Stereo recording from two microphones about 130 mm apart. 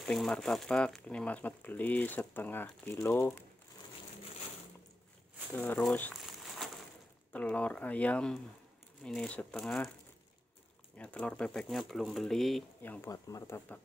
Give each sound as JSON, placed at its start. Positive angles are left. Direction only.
{"t": 0.0, "sound": "speech", "side_deg": 5}
{"t": 5.5, "sound": "speech", "side_deg": 15}
{"t": 7.3, "sound": "speech", "side_deg": 10}
{"t": 11.0, "sound": "speech", "side_deg": 10}
{"t": 12.8, "sound": "speech", "side_deg": 15}
{"t": 13.1, "sound": "speech", "side_deg": 25}